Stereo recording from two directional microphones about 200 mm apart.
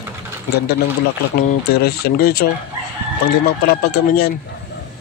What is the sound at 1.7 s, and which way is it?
A man's voice, 50° left (ahead or behind).